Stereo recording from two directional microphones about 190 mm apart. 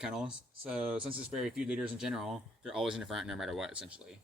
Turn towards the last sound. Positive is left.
turn(degrees=-5)  # may be behind; listen again after turning